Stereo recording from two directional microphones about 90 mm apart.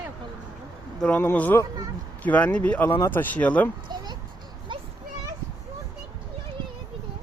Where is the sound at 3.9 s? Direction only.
50° right (ahead or behind).